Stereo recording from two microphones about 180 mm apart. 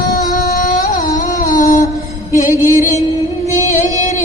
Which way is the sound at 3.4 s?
40° left (ahead or behind).